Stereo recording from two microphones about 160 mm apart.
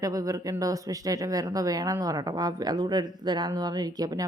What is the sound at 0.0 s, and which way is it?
Speech, 20° right (ahead or behind).